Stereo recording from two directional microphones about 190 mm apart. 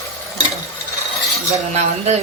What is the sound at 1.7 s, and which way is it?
Speech, 35° right (ahead or behind).